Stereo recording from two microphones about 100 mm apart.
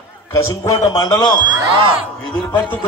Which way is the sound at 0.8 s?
40° left (ahead or behind).